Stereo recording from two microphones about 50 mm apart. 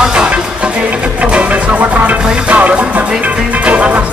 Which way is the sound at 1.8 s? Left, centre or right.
Right.